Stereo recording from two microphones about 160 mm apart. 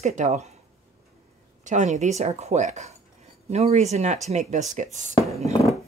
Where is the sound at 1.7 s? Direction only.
50° right (ahead or behind).